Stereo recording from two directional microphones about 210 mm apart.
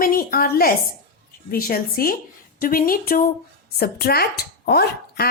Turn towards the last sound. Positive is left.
turn(degrees=50)  # may be behind; listen again after turning